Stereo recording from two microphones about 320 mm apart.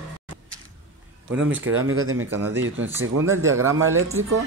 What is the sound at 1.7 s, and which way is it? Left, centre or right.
Speech, right.